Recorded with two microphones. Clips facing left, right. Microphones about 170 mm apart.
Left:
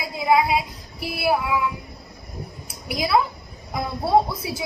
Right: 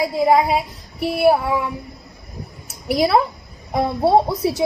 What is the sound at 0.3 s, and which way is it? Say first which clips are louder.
Speech: right 1 dB; 45° right (ahead or behind).